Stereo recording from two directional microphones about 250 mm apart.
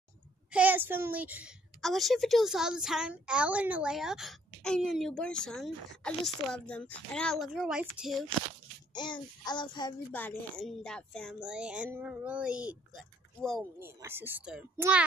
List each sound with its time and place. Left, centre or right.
0.5 s a woman's voice: centre
8.9 s child singing: centre
10.1 s a woman's voice: centre